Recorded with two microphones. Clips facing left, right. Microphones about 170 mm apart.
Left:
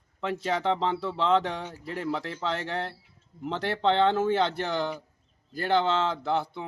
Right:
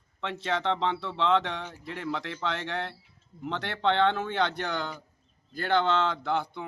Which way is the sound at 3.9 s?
5° left (ahead or behind).